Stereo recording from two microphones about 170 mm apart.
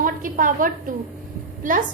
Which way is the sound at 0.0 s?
55° right (ahead or behind).